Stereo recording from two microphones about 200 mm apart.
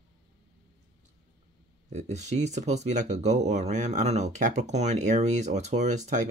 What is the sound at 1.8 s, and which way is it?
Speech, 35° right (ahead or behind).